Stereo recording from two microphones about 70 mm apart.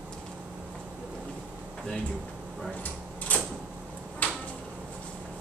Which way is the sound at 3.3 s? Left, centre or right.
Left.